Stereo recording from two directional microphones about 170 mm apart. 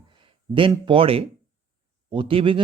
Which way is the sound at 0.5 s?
30° right (ahead or behind).